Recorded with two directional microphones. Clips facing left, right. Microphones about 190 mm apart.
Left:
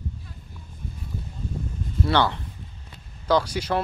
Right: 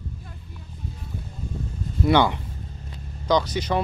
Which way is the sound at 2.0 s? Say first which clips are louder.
Right 4 dB; 15° right (ahead or behind).